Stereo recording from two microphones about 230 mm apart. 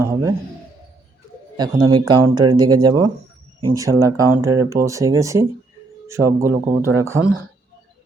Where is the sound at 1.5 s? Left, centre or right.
Centre.